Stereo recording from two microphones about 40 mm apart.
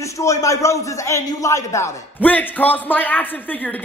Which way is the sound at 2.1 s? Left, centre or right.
Left.